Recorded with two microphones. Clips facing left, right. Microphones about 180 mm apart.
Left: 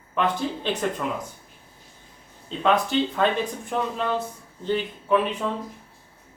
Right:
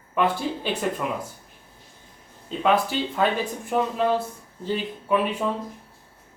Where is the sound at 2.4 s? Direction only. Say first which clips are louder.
Right 1 dB; 5° right (ahead or behind).